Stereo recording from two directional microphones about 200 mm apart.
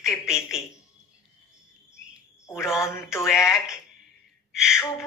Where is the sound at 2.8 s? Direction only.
15° left (ahead or behind).